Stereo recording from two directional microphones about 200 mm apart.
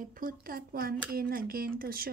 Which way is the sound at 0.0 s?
45° right (ahead or behind).